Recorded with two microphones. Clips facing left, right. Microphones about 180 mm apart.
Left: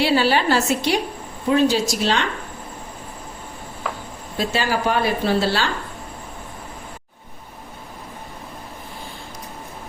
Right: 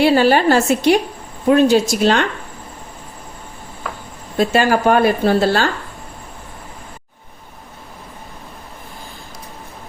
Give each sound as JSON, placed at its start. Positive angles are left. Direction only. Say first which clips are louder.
{"t": 0.0, "sound": "a woman's voice", "louder": "right 6 dB", "side_deg": -50}
{"t": 4.4, "sound": "a woman's voice", "louder": "right 7 dB", "side_deg": -50}